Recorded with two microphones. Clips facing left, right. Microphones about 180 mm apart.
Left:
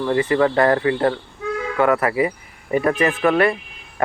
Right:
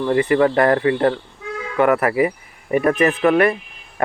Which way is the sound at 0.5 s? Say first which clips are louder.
Right 1 dB; 25° left (ahead or behind).